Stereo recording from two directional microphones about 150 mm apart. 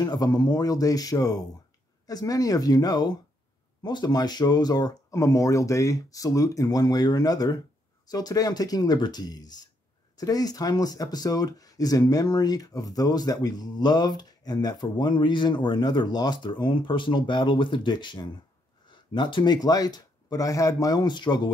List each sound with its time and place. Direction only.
0.0 s speech: 25° left (ahead or behind)